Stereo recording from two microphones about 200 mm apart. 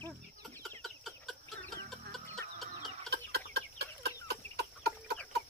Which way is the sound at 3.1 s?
55° right (ahead or behind).